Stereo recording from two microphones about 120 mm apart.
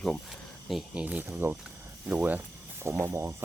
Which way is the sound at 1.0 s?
15° right (ahead or behind).